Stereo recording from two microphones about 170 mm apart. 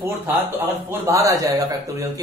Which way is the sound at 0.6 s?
10° right (ahead or behind).